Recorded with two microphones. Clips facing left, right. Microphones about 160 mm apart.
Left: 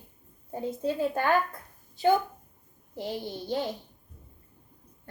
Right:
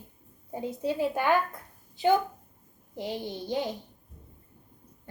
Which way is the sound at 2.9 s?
15° right (ahead or behind).